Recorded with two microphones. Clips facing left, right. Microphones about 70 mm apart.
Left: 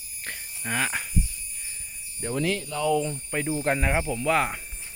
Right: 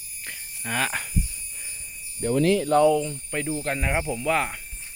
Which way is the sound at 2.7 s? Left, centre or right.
Right.